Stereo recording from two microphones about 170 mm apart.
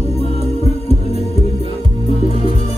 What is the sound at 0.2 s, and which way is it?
Music, 35° left (ahead or behind).